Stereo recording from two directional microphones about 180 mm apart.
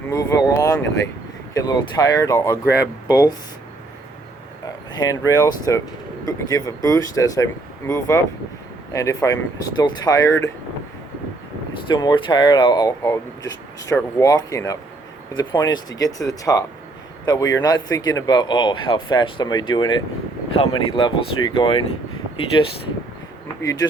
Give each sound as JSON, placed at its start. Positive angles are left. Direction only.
{"t": 0.1, "sound": "speech", "side_deg": 20}
{"t": 4.6, "sound": "speech", "side_deg": 20}
{"t": 11.9, "sound": "speech", "side_deg": 25}